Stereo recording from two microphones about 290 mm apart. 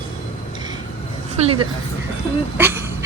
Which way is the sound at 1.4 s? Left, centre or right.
Centre.